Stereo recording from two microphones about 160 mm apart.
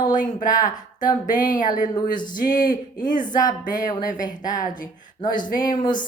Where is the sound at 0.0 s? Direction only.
55° left (ahead or behind).